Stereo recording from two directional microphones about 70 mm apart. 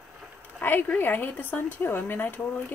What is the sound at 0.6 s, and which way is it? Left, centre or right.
Speech, left.